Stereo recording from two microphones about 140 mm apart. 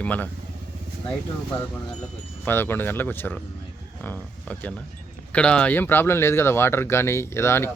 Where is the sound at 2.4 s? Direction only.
15° left (ahead or behind).